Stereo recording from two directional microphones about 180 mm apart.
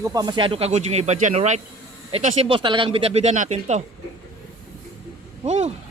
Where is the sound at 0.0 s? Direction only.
20° right (ahead or behind); by 3.8 s 40° right (ahead or behind).